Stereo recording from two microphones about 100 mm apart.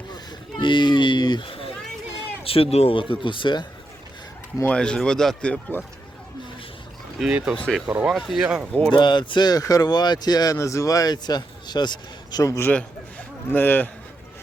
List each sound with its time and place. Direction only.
0.6 s a sound: 50° left (ahead or behind)
1.5 s a sound: 65° left (ahead or behind)
2.4 s speech: 70° left (ahead or behind); by 3.7 s 50° left (ahead or behind)
4.6 s speech: 10° left (ahead or behind)
7.2 s speech: 10° right (ahead or behind)
7.5 s speech: 10° left (ahead or behind)
7.9 s speech: 10° right (ahead or behind)
8.9 s speech: 50° left (ahead or behind)
12.5 s a man's voice: 30° left (ahead or behind)
13.5 s speech: 20° left (ahead or behind)